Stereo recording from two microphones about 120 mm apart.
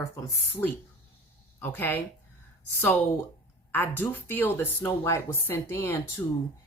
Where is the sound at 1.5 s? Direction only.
15° left (ahead or behind).